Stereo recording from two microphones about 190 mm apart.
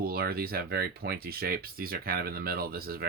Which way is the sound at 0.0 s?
50° right (ahead or behind).